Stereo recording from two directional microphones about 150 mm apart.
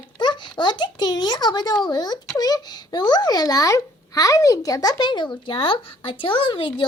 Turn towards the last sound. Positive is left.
turn(degrees=35)  # may be behind; listen again after turning